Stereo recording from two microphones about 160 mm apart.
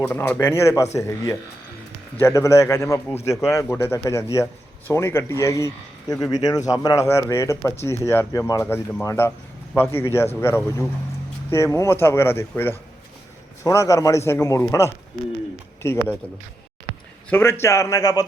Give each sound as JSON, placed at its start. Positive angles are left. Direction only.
{"t": 0.0, "sound": "a man's voice", "side_deg": 15}
{"t": 8.6, "sound": "a man's voice", "side_deg": 10}
{"t": 17.2, "sound": "speech", "side_deg": 15}